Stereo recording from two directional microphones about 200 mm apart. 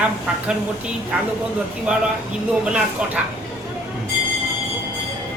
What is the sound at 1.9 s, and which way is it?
Speech, 5° right (ahead or behind).